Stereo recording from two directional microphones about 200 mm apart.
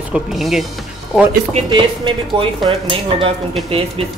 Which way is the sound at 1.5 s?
25° right (ahead or behind).